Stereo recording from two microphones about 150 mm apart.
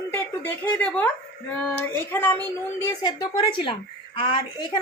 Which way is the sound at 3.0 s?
30° left (ahead or behind).